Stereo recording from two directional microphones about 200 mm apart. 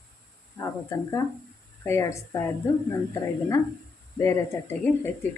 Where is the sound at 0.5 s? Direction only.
15° left (ahead or behind).